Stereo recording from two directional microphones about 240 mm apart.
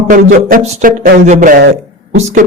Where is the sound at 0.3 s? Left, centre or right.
Right.